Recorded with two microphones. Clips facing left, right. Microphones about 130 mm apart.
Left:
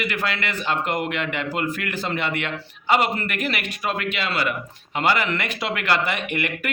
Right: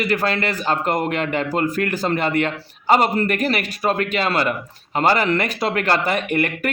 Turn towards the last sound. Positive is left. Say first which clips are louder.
# right 5 dB
turn(degrees=-40)  # may be behind; listen again after turning